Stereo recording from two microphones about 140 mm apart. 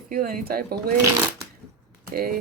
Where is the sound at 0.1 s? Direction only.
85° right.